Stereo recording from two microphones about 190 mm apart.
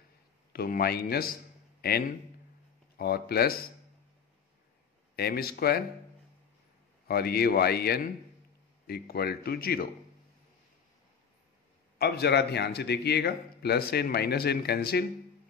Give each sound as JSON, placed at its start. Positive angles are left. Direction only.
{"t": 0.5, "sound": "a man's voice", "side_deg": 55}
{"t": 5.1, "sound": "a man's voice", "side_deg": 55}
{"t": 7.1, "sound": "a man's voice", "side_deg": 55}
{"t": 12.0, "sound": "a man's voice", "side_deg": 60}